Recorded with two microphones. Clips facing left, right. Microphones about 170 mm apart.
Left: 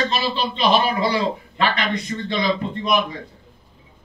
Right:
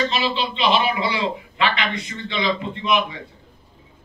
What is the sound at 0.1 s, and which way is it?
A man's voice, 40° left (ahead or behind).